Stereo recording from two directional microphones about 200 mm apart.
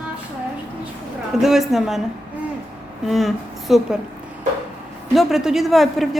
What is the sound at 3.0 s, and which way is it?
Speech, centre (ahead or behind).